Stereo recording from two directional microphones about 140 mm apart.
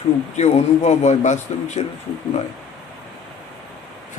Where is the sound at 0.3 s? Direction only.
50° left (ahead or behind).